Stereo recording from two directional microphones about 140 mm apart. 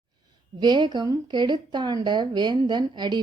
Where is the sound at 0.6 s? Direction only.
30° right (ahead or behind).